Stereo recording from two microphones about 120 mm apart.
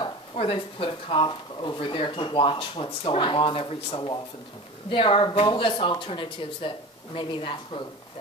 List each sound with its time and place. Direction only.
0.0 s speech: 50° left (ahead or behind)